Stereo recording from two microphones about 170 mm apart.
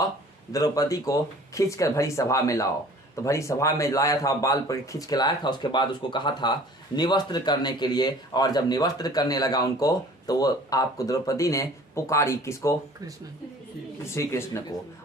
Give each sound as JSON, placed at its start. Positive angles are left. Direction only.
{"t": 0.5, "sound": "speech", "side_deg": 20}
{"t": 14.0, "sound": "speech", "side_deg": 15}